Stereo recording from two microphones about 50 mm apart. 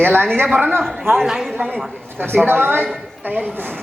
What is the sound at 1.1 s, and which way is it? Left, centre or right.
Speech, centre.